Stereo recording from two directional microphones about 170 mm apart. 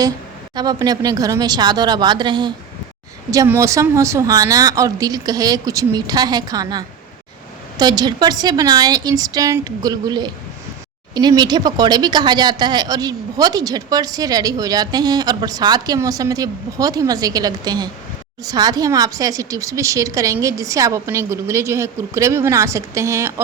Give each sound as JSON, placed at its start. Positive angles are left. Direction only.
{"t": 0.5, "sound": "speech", "side_deg": -25}
{"t": 3.3, "sound": "a woman's voice", "side_deg": -15}